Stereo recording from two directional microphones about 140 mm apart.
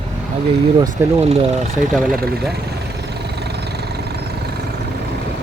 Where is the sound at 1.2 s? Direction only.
45° right (ahead or behind).